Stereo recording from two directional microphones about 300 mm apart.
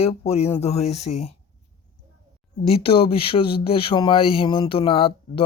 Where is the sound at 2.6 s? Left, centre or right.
Centre.